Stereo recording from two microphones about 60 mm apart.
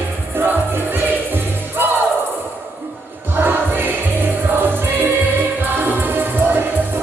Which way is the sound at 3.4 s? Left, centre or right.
Right.